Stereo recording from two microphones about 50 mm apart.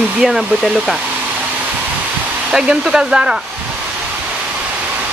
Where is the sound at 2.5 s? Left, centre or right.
Centre.